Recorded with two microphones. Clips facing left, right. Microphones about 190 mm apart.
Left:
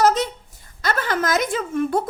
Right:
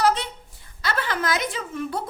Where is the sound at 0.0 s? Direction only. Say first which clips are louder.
Left 4 dB; 45° left (ahead or behind).